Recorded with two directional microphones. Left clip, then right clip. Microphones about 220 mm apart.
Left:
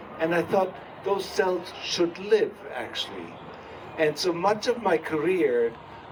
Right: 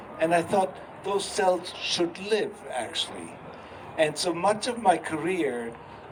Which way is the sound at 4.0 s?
40° right (ahead or behind).